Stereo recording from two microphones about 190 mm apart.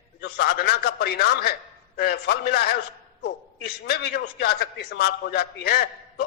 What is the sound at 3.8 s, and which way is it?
A man's voice, 55° left (ahead or behind).